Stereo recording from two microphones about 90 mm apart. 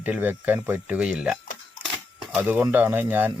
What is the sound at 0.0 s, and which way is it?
Speech, 20° right (ahead or behind).